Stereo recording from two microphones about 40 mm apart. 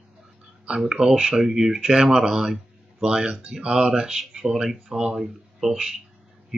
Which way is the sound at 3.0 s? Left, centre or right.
Right.